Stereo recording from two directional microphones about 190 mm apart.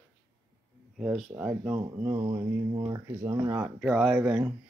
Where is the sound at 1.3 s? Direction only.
10° right (ahead or behind).